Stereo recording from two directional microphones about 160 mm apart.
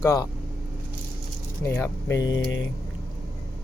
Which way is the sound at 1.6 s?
15° left (ahead or behind).